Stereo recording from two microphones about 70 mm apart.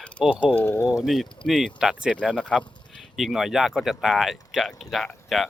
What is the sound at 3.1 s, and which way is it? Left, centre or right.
Speech, centre.